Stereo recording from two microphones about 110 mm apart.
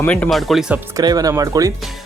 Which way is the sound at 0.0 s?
10° left (ahead or behind).